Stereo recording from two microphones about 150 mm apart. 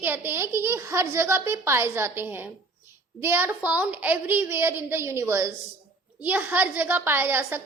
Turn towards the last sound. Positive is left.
turn(degrees=-15)  # may be behind; listen again after turning